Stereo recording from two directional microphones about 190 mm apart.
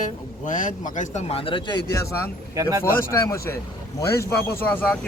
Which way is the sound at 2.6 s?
15° right (ahead or behind).